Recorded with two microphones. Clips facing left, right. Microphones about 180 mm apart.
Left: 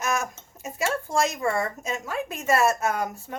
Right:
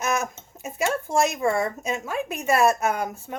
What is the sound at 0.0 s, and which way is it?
Speech, 20° right (ahead or behind).